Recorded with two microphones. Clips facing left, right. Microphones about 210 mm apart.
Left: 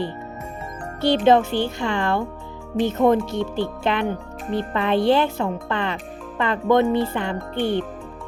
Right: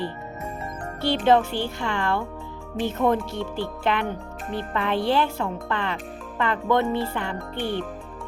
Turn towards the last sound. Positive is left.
turn(degrees=20)  # may be behind; listen again after turning